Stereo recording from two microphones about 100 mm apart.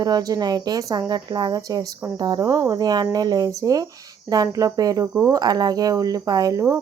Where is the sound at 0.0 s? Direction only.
40° right (ahead or behind).